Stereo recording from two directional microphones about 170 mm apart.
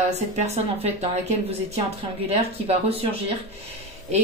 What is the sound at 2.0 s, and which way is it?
A woman's voice, 35° right (ahead or behind).